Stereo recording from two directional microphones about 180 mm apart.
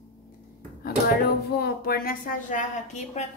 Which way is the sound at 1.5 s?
60° left (ahead or behind).